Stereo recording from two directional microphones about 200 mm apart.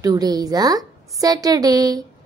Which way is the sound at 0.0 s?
20° right (ahead or behind).